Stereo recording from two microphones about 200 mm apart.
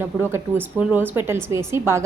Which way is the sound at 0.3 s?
10° right (ahead or behind).